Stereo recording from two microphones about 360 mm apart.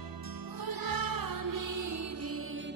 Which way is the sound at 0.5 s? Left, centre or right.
Right.